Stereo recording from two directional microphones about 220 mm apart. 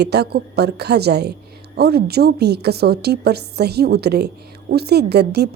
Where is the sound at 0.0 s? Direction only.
50° right (ahead or behind).